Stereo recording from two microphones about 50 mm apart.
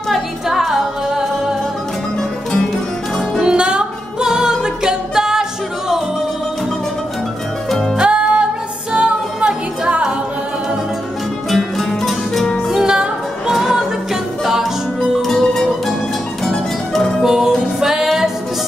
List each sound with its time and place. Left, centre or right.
0.1 s music: centre
3.3 s music: centre
8.0 s music: right
11.5 s music: centre
12.8 s music: centre
17.2 s music: centre